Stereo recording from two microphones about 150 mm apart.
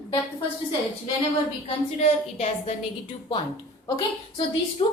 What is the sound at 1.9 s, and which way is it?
Speech, 50° left (ahead or behind).